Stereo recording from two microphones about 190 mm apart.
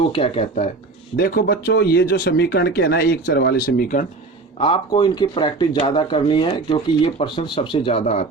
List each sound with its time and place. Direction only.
0.1 s speech: 30° left (ahead or behind)
1.1 s speech: 50° left (ahead or behind)
4.6 s speech: 25° left (ahead or behind)